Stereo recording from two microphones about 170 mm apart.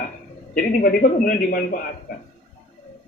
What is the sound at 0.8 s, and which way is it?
Speech, 60° left (ahead or behind).